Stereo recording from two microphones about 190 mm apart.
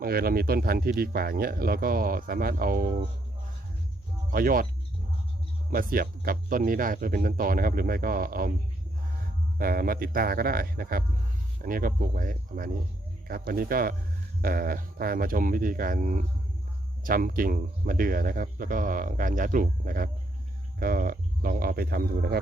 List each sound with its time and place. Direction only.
0.0 s speech: 50° right (ahead or behind)
4.3 s speech: 50° right (ahead or behind)
5.7 s speech: 50° right (ahead or behind)
9.6 s speech: 50° right (ahead or behind)